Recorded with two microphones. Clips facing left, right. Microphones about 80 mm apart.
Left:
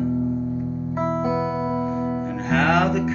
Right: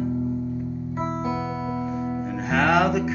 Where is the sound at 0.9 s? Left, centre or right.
Centre.